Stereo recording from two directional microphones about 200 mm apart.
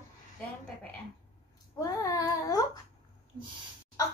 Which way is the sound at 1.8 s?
15° left (ahead or behind).